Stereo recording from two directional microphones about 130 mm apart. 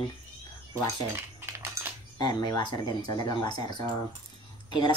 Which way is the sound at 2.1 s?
30° left (ahead or behind).